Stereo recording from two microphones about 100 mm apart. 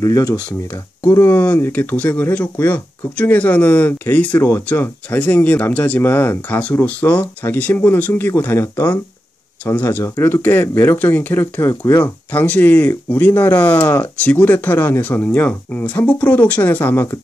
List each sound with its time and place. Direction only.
0.0 s speech: 30° left (ahead or behind)